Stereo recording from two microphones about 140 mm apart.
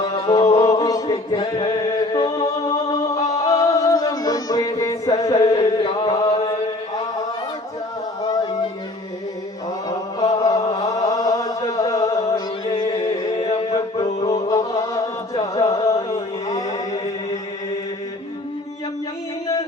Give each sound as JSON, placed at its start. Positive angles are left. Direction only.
{"t": 0.0, "sound": "a sound", "side_deg": 30}
{"t": 0.6, "sound": "chant", "side_deg": 25}
{"t": 3.5, "sound": "music", "side_deg": 25}
{"t": 10.3, "sound": "chant", "side_deg": 25}
{"t": 12.3, "sound": "music", "side_deg": 35}